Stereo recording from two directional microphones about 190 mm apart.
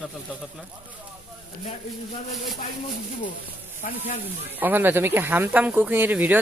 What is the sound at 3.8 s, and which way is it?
Speech, 40° left (ahead or behind).